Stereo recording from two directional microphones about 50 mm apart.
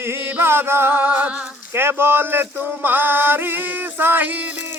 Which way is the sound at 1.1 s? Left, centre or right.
Right.